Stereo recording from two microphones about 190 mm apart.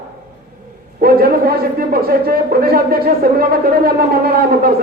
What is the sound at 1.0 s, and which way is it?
A man's voice, 50° right (ahead or behind).